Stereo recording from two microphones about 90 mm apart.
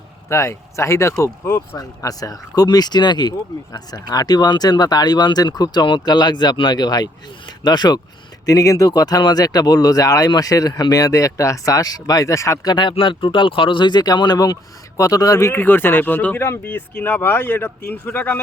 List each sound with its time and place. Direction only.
0.3 s speech: 30° left (ahead or behind)
1.7 s speech: 40° left (ahead or behind)
8.4 s speech: 40° left (ahead or behind)
12.7 s speech: 70° left (ahead or behind); by 18.3 s 25° left (ahead or behind)